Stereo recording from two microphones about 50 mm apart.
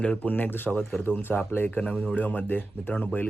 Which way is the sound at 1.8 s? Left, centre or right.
Left.